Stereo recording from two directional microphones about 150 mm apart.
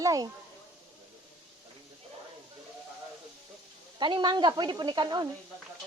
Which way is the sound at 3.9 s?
30° right (ahead or behind).